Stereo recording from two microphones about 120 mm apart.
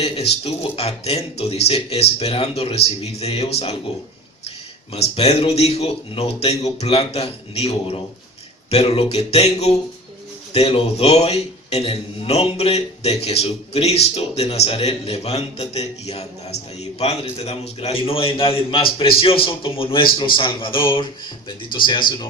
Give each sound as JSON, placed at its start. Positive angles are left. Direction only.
{"t": 0.0, "sound": "a man's voice", "side_deg": 55}